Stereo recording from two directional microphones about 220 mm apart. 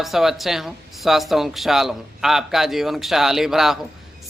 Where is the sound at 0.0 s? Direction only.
Centre (ahead or behind).